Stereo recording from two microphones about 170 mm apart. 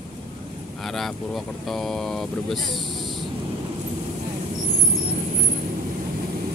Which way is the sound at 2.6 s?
25° right (ahead or behind).